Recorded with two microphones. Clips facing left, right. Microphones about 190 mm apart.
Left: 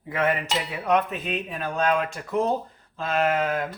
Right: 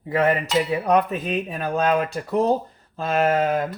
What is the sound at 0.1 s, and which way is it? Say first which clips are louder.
Speech: right 5 dB; 35° right (ahead or behind).